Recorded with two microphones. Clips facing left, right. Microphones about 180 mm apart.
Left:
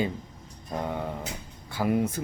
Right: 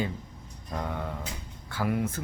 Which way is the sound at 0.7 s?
20° left (ahead or behind).